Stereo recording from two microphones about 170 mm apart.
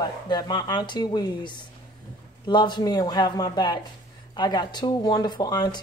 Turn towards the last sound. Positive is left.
turn(degrees=25)  # may be behind; listen again after turning